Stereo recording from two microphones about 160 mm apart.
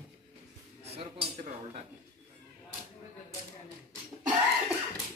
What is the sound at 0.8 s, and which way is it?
Cutlery, 40° right (ahead or behind).